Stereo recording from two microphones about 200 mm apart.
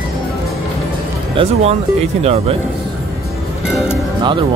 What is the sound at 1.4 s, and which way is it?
Speech, 25° right (ahead or behind).